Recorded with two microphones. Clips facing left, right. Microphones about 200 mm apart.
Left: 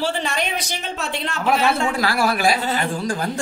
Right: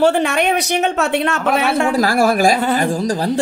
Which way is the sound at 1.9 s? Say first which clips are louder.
Right 6 dB; 45° right (ahead or behind).